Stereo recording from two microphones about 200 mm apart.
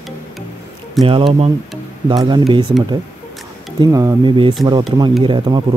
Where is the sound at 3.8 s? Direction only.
15° right (ahead or behind).